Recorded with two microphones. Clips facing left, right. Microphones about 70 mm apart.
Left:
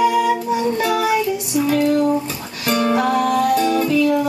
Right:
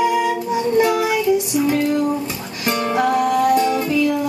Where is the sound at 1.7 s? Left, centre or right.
Centre.